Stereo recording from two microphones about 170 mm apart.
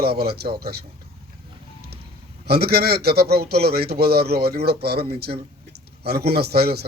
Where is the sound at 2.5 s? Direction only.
70° right (ahead or behind).